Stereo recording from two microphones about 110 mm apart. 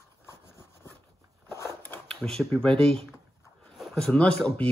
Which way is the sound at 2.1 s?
5° left (ahead or behind).